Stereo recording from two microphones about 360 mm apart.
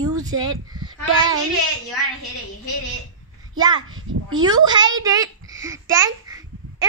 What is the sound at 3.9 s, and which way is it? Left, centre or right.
Speech, right.